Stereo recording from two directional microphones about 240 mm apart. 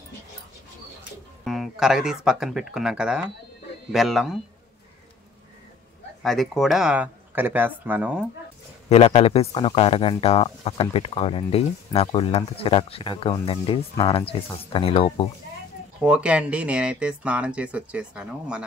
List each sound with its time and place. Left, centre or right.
1.4 s speech: centre
6.2 s speech: centre
8.8 s speech: left
16.0 s speech: centre